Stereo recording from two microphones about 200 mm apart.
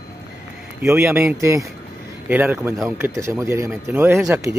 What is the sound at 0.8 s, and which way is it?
Speech, 15° right (ahead or behind).